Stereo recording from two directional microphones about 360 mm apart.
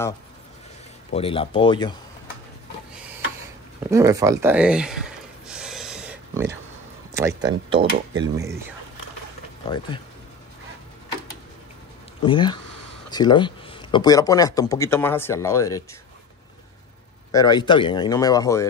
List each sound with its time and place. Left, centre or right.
1.1 s speech: centre
3.9 s a sound: centre
7.2 s speech: centre
7.9 s speech: right
12.2 s speech: centre
17.3 s speech: centre